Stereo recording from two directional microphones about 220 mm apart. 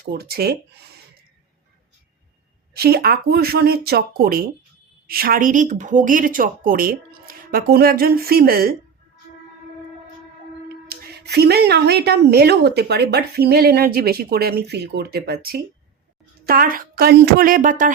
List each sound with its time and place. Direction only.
0.1 s speech: 45° right (ahead or behind)
2.7 s speech: 45° right (ahead or behind)
10.8 s speech: 45° right (ahead or behind)